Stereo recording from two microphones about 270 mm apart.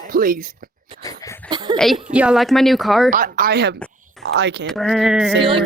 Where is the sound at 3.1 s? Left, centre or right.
Right.